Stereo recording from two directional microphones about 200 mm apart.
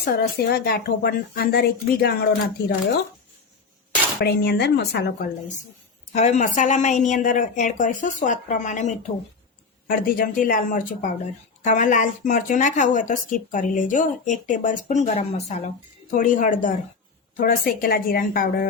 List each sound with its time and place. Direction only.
0.6 s speech: 50° left (ahead or behind)
4.2 s speech: 55° left (ahead or behind)
6.1 s speech: 35° left (ahead or behind)